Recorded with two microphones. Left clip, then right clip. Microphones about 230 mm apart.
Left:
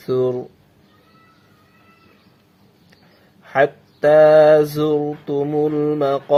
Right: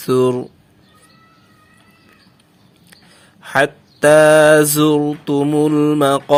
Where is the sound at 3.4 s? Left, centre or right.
Right.